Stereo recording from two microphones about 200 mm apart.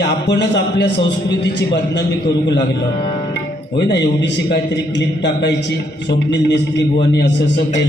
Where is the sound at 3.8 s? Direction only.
60° left (ahead or behind).